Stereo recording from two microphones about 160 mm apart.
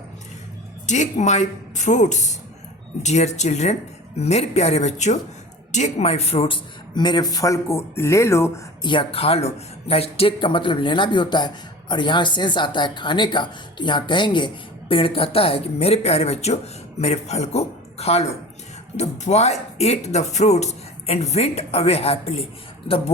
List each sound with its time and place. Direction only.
0.9 s speech: 50° left (ahead or behind); by 8.6 s 15° left (ahead or behind)
8.8 s speech: 30° left (ahead or behind)